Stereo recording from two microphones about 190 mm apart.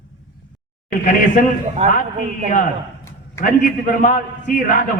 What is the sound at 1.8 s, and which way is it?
Speech, 35° right (ahead or behind).